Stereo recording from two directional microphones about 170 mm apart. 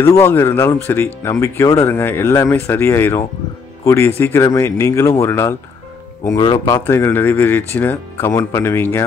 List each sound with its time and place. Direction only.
0.0 s speech: 15° left (ahead or behind)